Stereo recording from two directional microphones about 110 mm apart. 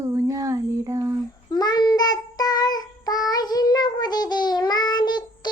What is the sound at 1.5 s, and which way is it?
Child singing, 40° left (ahead or behind).